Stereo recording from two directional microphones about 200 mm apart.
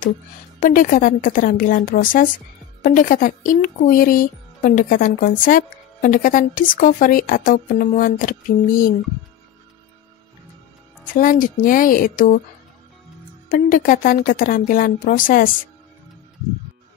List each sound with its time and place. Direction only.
0.6 s a woman's voice: 45° left (ahead or behind)
11.1 s a woman's voice: 40° left (ahead or behind)
13.5 s a woman's voice: 45° left (ahead or behind)